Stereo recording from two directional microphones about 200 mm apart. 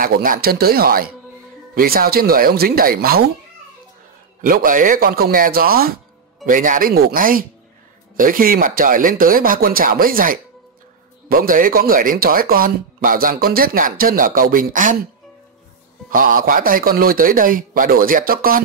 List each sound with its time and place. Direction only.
0.0 s speech: 45° right (ahead or behind)
4.4 s speech: 45° right (ahead or behind)
16.1 s speech: 45° right (ahead or behind)